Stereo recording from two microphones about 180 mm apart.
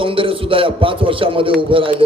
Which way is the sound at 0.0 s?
30° right (ahead or behind).